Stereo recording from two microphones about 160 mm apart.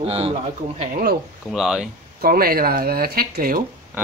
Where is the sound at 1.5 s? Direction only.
Centre (ahead or behind).